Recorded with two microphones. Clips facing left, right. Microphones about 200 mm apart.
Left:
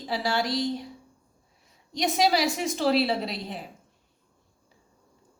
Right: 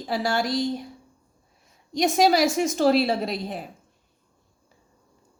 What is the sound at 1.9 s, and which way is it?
A woman's voice, 45° right (ahead or behind).